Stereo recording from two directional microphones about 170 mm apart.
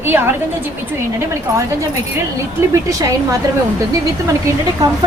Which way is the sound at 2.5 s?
20° right (ahead or behind).